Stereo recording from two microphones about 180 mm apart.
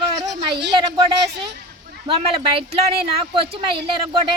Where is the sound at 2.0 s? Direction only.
30° right (ahead or behind).